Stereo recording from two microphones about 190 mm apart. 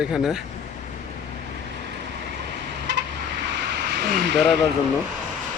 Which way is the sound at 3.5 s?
60° right (ahead or behind).